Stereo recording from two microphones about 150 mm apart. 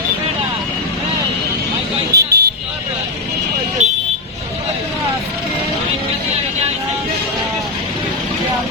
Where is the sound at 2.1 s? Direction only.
90° right.